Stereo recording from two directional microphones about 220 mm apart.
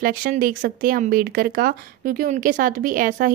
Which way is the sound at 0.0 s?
40° right (ahead or behind).